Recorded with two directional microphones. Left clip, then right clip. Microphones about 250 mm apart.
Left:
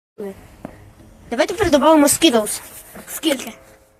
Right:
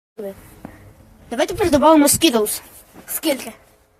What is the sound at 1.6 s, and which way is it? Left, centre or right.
Speech, centre.